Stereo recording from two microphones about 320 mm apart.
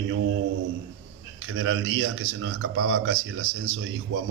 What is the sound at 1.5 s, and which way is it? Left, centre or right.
A man's voice, right.